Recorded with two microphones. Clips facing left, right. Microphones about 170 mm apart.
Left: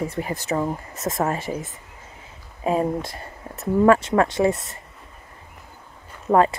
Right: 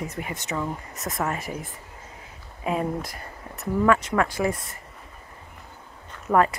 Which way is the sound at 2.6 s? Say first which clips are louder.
Left 4 dB; 30° left (ahead or behind).